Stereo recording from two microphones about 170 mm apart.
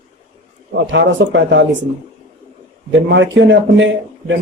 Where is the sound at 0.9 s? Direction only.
90° right.